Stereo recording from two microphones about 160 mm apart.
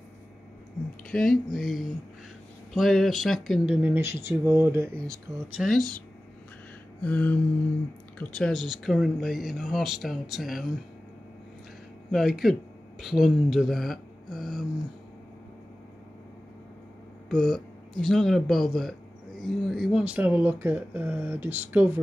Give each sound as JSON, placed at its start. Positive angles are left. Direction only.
{"t": 1.1, "sound": "speech", "side_deg": 0}
{"t": 5.6, "sound": "speech", "side_deg": 0}
{"t": 7.0, "sound": "a sound", "side_deg": 10}
{"t": 8.2, "sound": "speech", "side_deg": 5}
{"t": 12.1, "sound": "speech", "side_deg": 0}
{"t": 17.3, "sound": "speech", "side_deg": 0}